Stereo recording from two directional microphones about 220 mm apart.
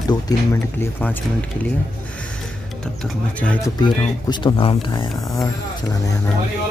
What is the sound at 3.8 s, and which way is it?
Speech, 20° left (ahead or behind).